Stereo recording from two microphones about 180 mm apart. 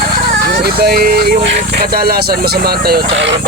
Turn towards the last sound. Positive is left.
turn(degrees=-70)  # may be behind; listen again after turning